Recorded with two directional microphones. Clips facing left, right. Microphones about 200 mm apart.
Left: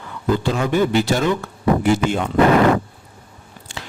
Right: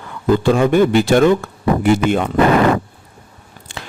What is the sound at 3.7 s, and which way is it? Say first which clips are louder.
Biting: right 2 dB; 55° right (ahead or behind).